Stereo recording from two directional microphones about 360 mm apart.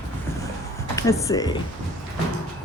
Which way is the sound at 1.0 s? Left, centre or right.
Centre.